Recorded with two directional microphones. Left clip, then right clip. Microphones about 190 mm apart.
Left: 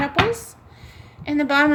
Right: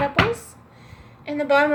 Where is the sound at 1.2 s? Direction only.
60° left (ahead or behind).